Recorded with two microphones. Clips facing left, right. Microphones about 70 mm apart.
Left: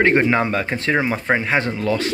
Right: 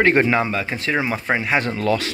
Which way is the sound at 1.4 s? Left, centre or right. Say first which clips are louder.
Left 1 dB; left.